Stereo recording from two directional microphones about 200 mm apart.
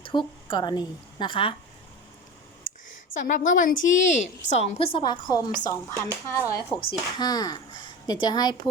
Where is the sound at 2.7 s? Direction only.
40° left (ahead or behind).